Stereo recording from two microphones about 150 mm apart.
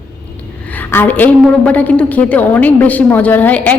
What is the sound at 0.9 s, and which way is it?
A woman's voice, 10° left (ahead or behind).